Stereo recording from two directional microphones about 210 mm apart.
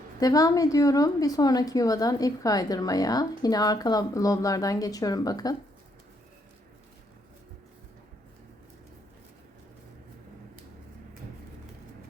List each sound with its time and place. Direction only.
0.2 s a woman's voice: 15° left (ahead or behind)